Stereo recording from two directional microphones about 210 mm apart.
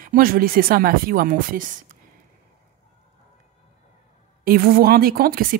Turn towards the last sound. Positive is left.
turn(degrees=-45)  # may be behind; listen again after turning